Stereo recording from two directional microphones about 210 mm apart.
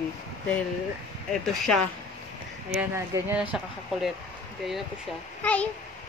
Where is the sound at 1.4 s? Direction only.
Centre (ahead or behind).